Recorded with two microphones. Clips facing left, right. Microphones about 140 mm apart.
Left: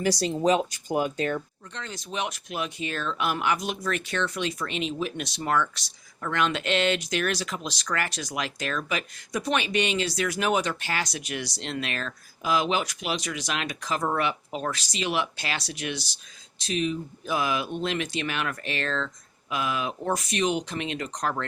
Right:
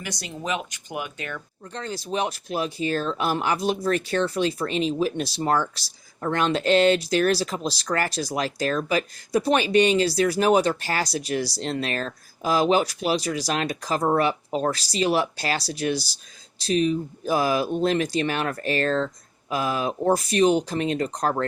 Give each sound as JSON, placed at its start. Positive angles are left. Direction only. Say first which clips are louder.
{"t": 0.0, "sound": "speech", "louder": "left 9 dB", "side_deg": 35}
{"t": 1.7, "sound": "speech", "louder": "right 6 dB", "side_deg": -35}